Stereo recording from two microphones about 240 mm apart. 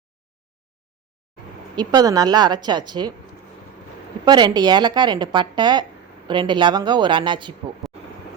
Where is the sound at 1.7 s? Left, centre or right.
Centre.